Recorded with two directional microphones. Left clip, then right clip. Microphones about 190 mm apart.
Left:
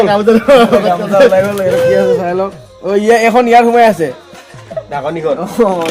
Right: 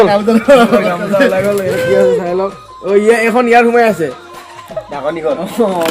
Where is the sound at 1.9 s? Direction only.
40° left (ahead or behind).